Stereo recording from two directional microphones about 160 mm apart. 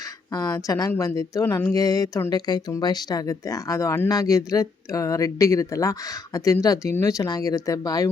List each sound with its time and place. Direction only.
0.7 s a woman's voice: 20° left (ahead or behind)